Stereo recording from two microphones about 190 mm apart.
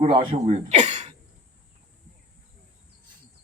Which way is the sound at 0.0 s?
25° right (ahead or behind).